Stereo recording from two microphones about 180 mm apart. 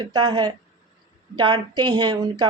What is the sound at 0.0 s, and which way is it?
Speech, 25° right (ahead or behind).